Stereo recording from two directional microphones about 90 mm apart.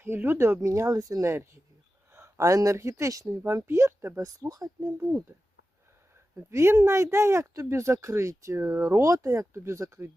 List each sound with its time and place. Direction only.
0.0 s speech: 25° right (ahead or behind); by 4.9 s 40° right (ahead or behind)
6.3 s speech: 30° right (ahead or behind)